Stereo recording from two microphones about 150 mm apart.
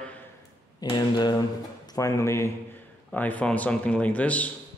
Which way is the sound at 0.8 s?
30° left (ahead or behind).